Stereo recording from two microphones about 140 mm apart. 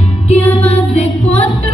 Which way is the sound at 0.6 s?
50° left (ahead or behind).